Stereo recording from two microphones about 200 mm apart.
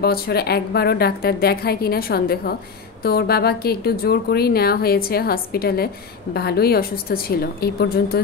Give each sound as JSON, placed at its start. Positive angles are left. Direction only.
{"t": 0.0, "sound": "a woman's voice", "side_deg": 50}